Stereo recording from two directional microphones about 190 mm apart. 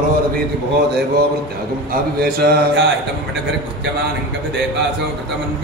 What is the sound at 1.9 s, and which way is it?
Speech, 55° right (ahead or behind).